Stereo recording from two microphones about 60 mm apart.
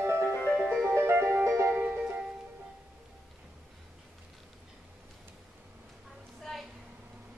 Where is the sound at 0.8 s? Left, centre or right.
Right.